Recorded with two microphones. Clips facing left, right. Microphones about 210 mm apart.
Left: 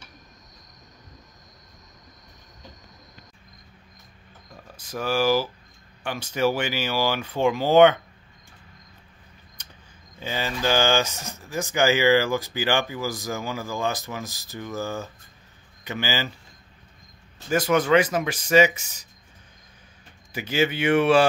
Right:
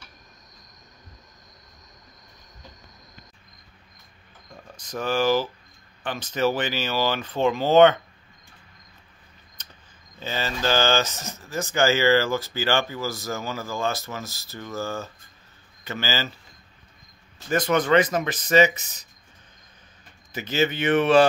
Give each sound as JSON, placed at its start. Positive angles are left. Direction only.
{"t": 4.7, "sound": "speech", "side_deg": 10}
{"t": 9.6, "sound": "a sound", "side_deg": 10}
{"t": 10.2, "sound": "speech", "side_deg": 15}
{"t": 17.5, "sound": "speech", "side_deg": 5}
{"t": 20.3, "sound": "speech", "side_deg": 10}